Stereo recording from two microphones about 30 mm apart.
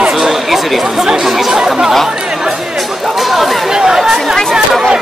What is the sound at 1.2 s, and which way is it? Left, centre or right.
Speech, centre.